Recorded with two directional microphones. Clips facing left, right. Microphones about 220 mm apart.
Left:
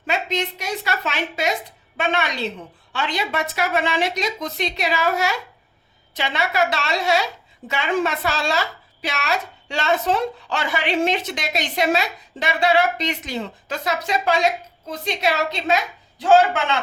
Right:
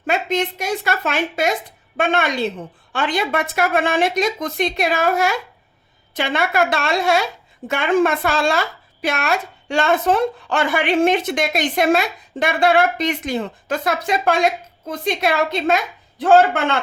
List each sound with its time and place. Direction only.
0.0 s speech: 50° right (ahead or behind)